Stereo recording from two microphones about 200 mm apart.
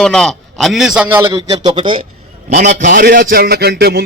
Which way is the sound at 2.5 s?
35° right (ahead or behind).